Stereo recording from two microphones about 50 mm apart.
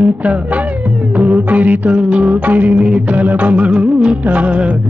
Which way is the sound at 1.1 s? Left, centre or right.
Right.